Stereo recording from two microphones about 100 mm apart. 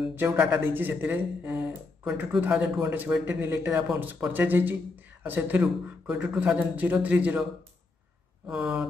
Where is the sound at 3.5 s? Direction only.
25° right (ahead or behind).